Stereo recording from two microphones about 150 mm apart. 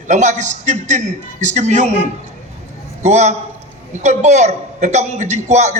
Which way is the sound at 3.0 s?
50° right (ahead or behind).